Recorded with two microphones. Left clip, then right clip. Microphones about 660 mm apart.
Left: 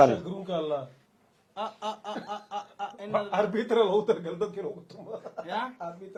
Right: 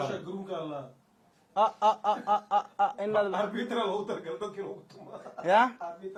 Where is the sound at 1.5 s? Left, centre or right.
Right.